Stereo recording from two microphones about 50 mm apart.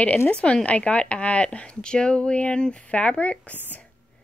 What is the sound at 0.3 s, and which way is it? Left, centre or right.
Speech, left.